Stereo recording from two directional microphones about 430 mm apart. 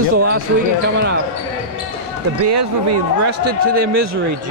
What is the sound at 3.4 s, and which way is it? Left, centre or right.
Speech, right.